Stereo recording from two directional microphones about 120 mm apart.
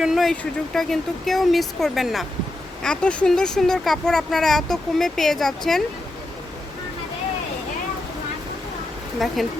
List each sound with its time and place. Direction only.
0.0 s speech: centre (ahead or behind)
9.1 s speech: centre (ahead or behind)